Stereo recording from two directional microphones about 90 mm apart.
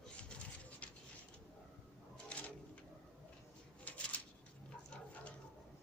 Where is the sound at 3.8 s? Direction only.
15° left (ahead or behind).